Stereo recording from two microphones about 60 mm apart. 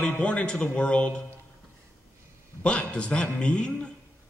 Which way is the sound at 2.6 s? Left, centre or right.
Centre.